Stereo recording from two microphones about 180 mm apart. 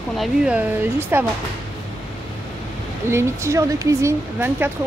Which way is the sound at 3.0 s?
15° right (ahead or behind).